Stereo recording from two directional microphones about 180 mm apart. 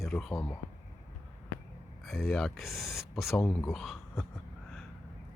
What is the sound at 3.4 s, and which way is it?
Speech, 15° left (ahead or behind).